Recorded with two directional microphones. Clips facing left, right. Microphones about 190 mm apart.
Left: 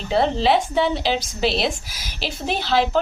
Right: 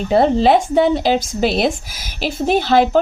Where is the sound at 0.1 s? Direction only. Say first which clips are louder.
Right 5 dB; 45° right (ahead or behind).